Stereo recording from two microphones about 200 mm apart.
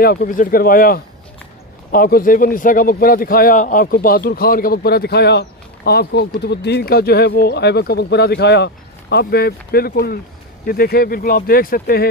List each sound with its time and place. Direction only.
0.0 s a man's voice: 50° left (ahead or behind)